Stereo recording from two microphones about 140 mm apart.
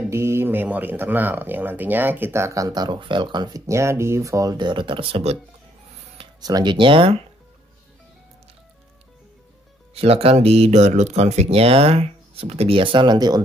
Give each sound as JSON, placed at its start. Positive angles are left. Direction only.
{"t": 0.0, "sound": "speech", "side_deg": -20}
{"t": 6.4, "sound": "speech", "side_deg": -30}
{"t": 9.9, "sound": "speech", "side_deg": -45}